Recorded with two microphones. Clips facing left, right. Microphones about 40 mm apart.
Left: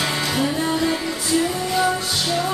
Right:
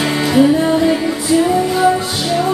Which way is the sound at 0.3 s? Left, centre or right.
Centre.